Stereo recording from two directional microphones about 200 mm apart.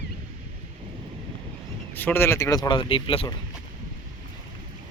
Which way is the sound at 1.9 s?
10° left (ahead or behind).